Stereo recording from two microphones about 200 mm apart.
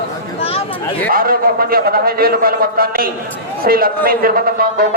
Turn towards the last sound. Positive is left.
turn(degrees=-45)  # may be behind; listen again after turning